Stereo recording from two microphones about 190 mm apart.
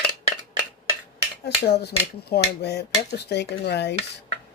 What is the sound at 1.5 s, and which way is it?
Speech, 60° left (ahead or behind).